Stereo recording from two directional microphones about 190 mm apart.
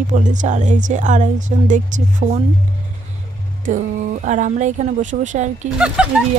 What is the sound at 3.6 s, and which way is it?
Speech, 45° right (ahead or behind).